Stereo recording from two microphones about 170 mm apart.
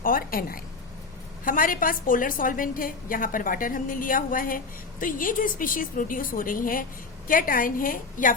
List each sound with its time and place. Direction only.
0.0 s a woman's voice: 55° left (ahead or behind)